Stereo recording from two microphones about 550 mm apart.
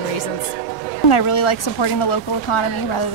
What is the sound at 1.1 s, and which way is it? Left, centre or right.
Speech, left.